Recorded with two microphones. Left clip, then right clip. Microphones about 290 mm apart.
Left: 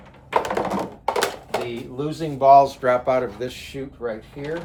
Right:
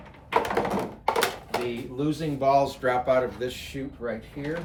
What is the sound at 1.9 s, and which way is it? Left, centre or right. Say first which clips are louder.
Speech: left 2 dB; centre.